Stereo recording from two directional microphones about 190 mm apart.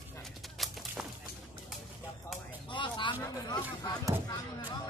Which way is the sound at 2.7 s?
25° left (ahead or behind).